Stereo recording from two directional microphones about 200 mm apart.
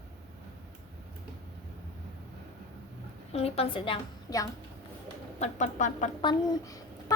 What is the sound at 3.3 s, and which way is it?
A woman's voice, 30° left (ahead or behind).